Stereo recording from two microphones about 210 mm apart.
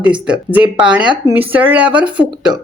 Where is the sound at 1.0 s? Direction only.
20° right (ahead or behind).